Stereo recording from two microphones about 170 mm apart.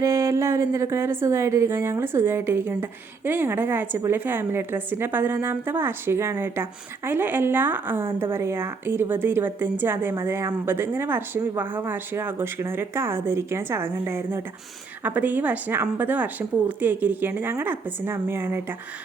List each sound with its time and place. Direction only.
0.0 s a woman's voice: 20° right (ahead or behind)